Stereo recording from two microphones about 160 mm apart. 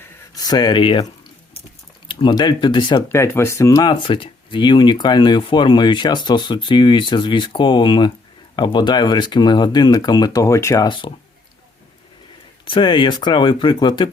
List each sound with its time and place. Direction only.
0.4 s speech: 25° left (ahead or behind)
2.0 s speech: 30° left (ahead or behind)
3.1 s speech: 15° left (ahead or behind)
10.8 s speech: 30° left (ahead or behind)
12.6 s speech: 30° left (ahead or behind)